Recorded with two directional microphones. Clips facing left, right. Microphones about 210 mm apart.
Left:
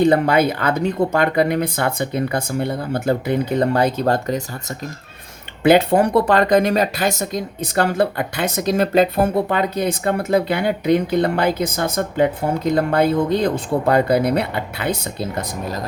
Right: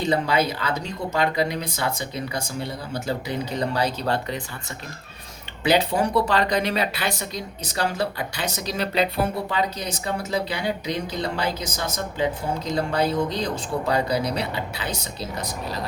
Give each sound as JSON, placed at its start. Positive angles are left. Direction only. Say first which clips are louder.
{"t": 0.0, "sound": "speech", "louder": "left 7 dB", "side_deg": 55}
{"t": 5.6, "sound": "speech", "louder": "left 7 dB", "side_deg": 55}